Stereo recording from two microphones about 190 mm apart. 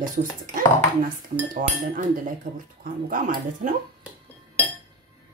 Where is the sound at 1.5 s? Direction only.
45° right (ahead or behind).